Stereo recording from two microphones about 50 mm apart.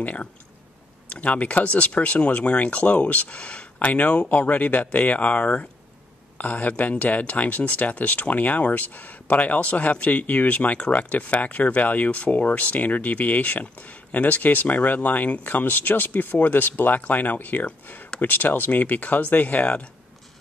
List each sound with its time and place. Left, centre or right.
0.0 s speech: left